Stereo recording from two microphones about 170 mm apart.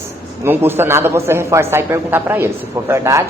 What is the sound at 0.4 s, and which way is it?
Speech, 15° right (ahead or behind).